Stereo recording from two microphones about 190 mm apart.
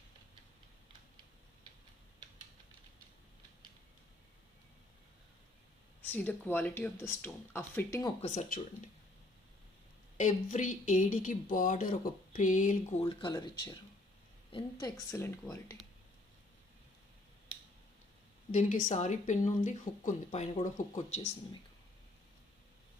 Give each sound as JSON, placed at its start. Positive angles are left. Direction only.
{"t": 6.0, "sound": "speech", "side_deg": 10}
{"t": 8.2, "sound": "speech", "side_deg": 40}
{"t": 10.2, "sound": "a woman's voice", "side_deg": 40}
{"t": 18.5, "sound": "speech", "side_deg": 40}